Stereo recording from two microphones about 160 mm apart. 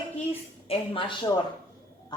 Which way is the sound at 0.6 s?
35° left (ahead or behind).